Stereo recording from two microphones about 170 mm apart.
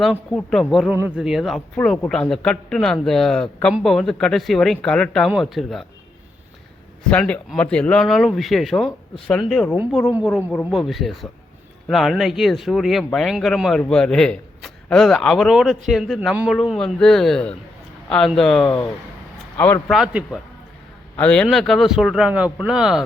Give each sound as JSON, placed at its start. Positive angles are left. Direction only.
{"t": 0.0, "sound": "speech", "side_deg": 0}
{"t": 7.1, "sound": "speech", "side_deg": 5}
{"t": 18.6, "sound": "speech", "side_deg": 25}
{"t": 19.5, "sound": "speech", "side_deg": 15}
{"t": 19.9, "sound": "speech", "side_deg": 0}